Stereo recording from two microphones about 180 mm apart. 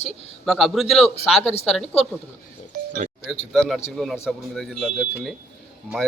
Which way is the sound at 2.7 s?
45° right (ahead or behind).